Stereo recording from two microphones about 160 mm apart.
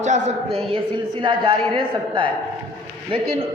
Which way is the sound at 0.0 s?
50° right (ahead or behind).